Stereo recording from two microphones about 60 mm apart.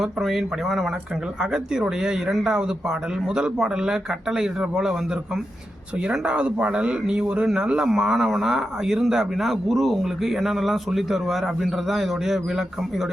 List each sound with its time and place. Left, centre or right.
0.0 s speech: centre
6.1 s speech: centre